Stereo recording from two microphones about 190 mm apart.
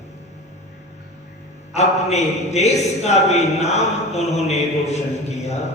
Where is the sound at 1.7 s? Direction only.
35° left (ahead or behind).